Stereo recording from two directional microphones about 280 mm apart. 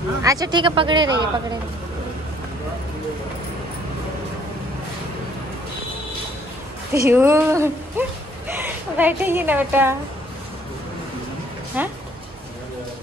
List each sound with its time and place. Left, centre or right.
0.2 s a woman's voice: centre
6.9 s a woman's voice: centre
11.7 s speech: centre